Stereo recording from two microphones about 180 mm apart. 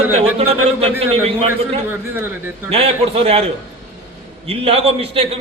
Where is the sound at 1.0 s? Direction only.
35° right (ahead or behind).